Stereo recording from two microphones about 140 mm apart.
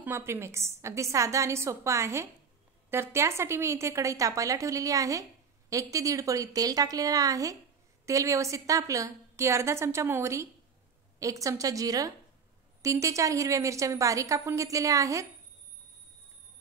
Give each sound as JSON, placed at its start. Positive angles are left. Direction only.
{"t": 0.0, "sound": "a woman's voice", "side_deg": -15}